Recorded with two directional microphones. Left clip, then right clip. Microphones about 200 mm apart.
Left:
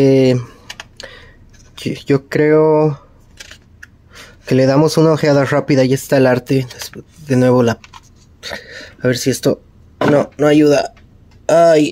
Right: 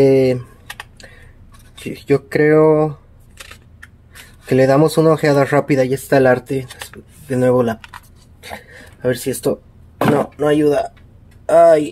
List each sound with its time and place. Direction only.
0.0 s typing: 30° left (ahead or behind)
1.8 s speech: 30° left (ahead or behind)
4.5 s speech: 30° left (ahead or behind)